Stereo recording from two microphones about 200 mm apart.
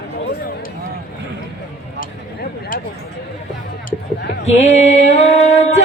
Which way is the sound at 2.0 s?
45° left (ahead or behind).